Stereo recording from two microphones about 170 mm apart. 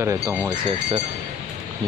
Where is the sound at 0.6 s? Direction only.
30° right (ahead or behind).